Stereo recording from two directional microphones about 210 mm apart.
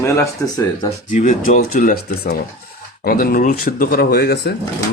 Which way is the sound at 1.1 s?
35° left (ahead or behind).